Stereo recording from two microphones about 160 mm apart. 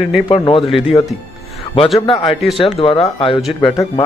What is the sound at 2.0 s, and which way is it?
Speech, 30° left (ahead or behind).